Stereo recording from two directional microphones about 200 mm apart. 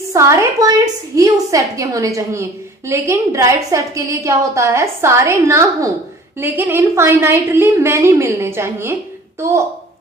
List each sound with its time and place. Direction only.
0.1 s a woman's voice: 15° right (ahead or behind)